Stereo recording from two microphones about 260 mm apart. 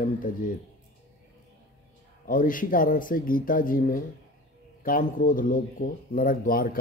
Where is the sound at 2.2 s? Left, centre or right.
Left.